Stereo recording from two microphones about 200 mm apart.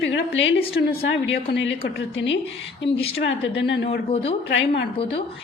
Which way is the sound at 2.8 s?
30° left (ahead or behind).